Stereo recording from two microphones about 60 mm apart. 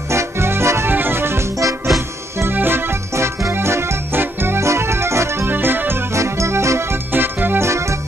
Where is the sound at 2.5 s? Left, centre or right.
Right.